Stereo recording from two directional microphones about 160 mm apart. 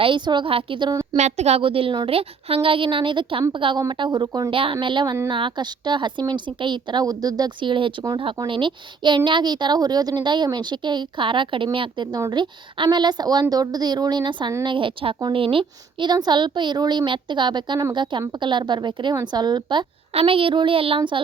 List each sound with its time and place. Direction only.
0.0 s a woman's voice: 30° right (ahead or behind)
1.1 s a woman's voice: 45° right (ahead or behind); by 4.5 s 25° right (ahead or behind)
4.5 s a woman's voice: 35° right (ahead or behind)